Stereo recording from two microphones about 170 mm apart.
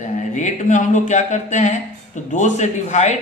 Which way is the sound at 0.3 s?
45° left (ahead or behind).